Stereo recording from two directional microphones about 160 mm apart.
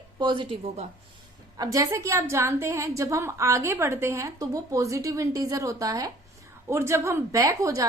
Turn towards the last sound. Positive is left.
turn(degrees=-20)  # may be behind; listen again after turning